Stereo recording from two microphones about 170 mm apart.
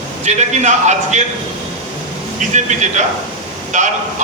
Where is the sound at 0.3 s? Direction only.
40° right (ahead or behind).